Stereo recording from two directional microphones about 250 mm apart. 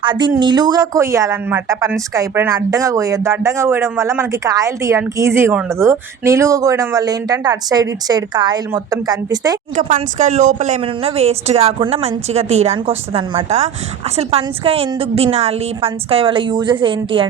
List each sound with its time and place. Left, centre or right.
0.0 s a woman's voice: centre
9.7 s speech: right